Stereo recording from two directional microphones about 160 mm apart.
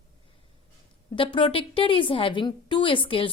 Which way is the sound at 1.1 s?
30° left (ahead or behind).